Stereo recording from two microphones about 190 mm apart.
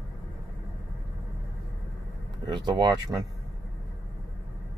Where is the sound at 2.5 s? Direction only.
25° right (ahead or behind).